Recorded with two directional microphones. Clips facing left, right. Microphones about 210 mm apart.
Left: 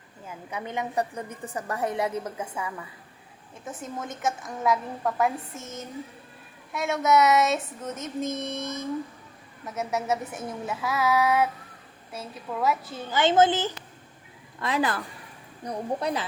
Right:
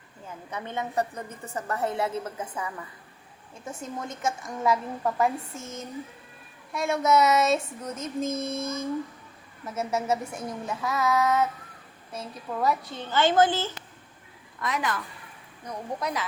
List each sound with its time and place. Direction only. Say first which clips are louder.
0.3 s a woman's voice: left 1 dB; 10° left (ahead or behind)
3.6 s a sound: even; centre (ahead or behind)
5.5 s speech: even; 20° left (ahead or behind)
6.7 s a sound: even; centre (ahead or behind)
8.4 s a woman's voice: right 2 dB; 20° left (ahead or behind)
9.6 s a woman's voice: right 1 dB; centre (ahead or behind); by 13.7 s 20° left (ahead or behind)
14.6 s speech: left 3 dB; 30° left (ahead or behind)